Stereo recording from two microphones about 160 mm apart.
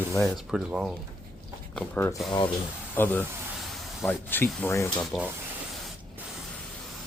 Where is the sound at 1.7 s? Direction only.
10° left (ahead or behind).